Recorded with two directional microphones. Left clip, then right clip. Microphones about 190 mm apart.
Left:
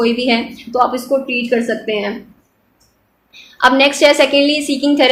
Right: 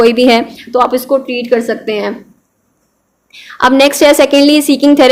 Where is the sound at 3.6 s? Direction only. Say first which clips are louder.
Right 3 dB; 45° right (ahead or behind).